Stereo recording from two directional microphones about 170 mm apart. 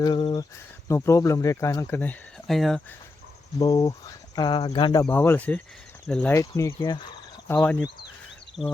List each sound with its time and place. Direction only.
0.0 s speech: 30° left (ahead or behind)
0.9 s speech: 15° left (ahead or behind)
2.5 s speech: centre (ahead or behind)
3.6 s speech: 20° left (ahead or behind)
5.0 s speech: 10° left (ahead or behind)
6.6 s speech: 15° left (ahead or behind); by 8.7 s centre (ahead or behind)